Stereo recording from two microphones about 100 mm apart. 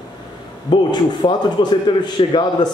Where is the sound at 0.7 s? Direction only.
50° left (ahead or behind).